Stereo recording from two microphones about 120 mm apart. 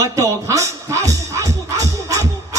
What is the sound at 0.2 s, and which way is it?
Music, 25° right (ahead or behind).